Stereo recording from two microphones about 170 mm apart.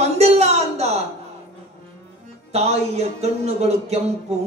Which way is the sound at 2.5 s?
40° right (ahead or behind).